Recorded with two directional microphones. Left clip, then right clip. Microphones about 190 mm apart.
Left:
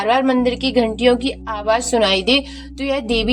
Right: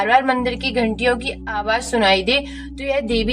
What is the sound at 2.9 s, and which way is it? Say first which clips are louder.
Speech: left 1 dB; 30° left (ahead or behind).